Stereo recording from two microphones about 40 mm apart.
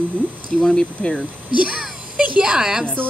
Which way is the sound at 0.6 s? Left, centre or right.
Centre.